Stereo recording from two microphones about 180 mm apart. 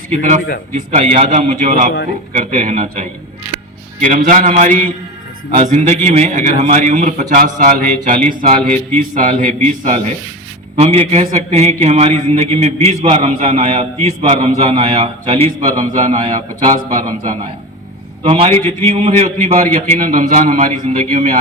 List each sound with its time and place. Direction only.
0.1 s a man's voice: 40° right (ahead or behind)
8.3 s speech: 25° right (ahead or behind)
9.0 s a man's voice: 45° right (ahead or behind)
18.2 s a man's voice: 30° right (ahead or behind)